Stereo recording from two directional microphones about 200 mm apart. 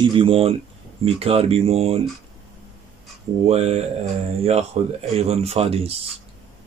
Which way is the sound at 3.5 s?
30° right (ahead or behind).